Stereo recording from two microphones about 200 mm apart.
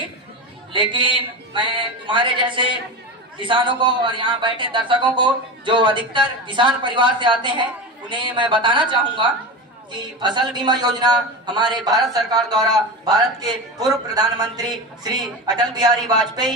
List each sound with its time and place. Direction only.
0.7 s a man's voice: 25° right (ahead or behind)
10.5 s a man's voice: 20° right (ahead or behind)